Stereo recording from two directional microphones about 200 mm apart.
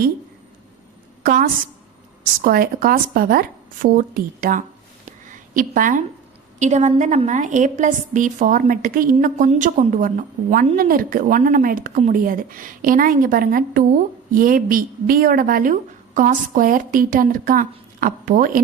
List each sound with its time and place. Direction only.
1.2 s a woman's voice: 45° right (ahead or behind)